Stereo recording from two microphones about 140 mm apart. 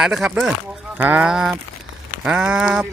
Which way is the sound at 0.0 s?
5° right (ahead or behind).